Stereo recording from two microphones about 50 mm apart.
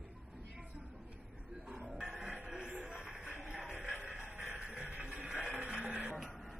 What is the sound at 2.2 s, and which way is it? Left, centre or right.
Music, centre.